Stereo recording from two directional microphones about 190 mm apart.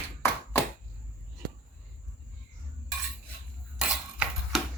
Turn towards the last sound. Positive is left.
turn(degrees=-5)  # may be behind; listen again after turning